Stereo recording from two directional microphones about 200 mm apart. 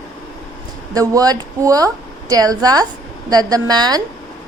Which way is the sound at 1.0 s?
20° right (ahead or behind).